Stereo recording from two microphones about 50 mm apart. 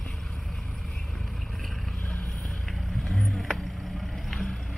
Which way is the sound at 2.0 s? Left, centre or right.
Left.